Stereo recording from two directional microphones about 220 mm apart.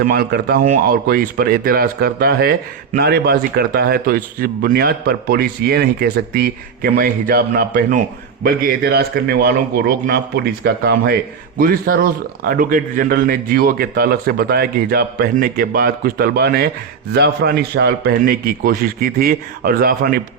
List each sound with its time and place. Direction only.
0.0 s a man's voice: 45° right (ahead or behind)